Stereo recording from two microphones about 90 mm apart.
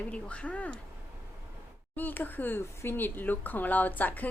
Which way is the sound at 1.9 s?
20° left (ahead or behind).